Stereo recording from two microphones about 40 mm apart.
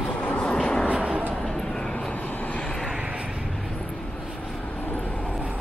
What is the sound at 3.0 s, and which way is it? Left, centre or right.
Vehicle, right.